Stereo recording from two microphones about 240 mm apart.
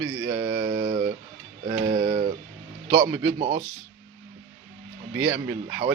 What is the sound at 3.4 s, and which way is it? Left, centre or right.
Speech, right.